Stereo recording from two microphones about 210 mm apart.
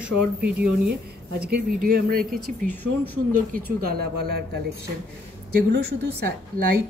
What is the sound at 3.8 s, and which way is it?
Speech, 45° right (ahead or behind).